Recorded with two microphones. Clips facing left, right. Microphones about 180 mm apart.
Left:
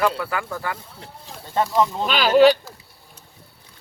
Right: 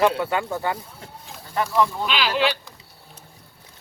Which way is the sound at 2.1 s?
45° left (ahead or behind).